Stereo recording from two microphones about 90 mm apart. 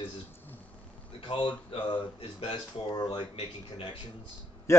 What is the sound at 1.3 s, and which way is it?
Speech, 75° left (ahead or behind).